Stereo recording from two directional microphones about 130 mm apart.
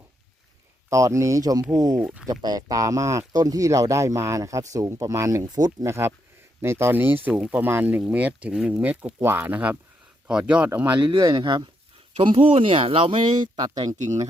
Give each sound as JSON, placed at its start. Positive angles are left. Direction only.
{"t": 0.9, "sound": "speech", "side_deg": -25}
{"t": 2.0, "sound": "speech", "side_deg": -5}
{"t": 2.2, "sound": "speech", "side_deg": -30}
{"t": 10.9, "sound": "speech", "side_deg": -35}
{"t": 13.8, "sound": "speech", "side_deg": -60}